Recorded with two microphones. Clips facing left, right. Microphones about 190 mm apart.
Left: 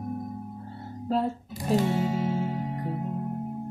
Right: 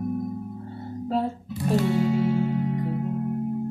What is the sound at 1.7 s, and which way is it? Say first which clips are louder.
Music: right 3 dB; 20° left (ahead or behind).